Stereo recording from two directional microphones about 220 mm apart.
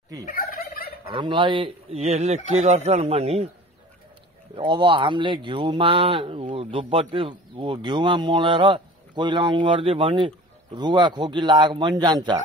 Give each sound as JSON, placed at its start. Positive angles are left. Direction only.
{"t": 0.3, "sound": "fowl", "side_deg": 40}
{"t": 1.1, "sound": "speech", "side_deg": -20}
{"t": 4.6, "sound": "speech", "side_deg": -20}